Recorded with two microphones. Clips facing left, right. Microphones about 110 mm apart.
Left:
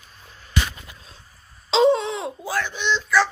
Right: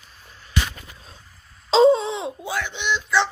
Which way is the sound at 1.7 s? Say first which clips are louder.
Right 2 dB; 30° right (ahead or behind).